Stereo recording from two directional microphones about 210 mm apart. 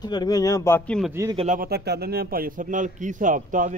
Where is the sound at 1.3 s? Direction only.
35° right (ahead or behind).